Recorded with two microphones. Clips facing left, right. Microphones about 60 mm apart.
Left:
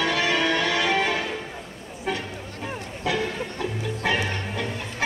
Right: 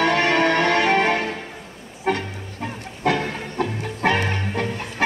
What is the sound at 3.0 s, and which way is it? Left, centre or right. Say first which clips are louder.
Music: right 4 dB; right.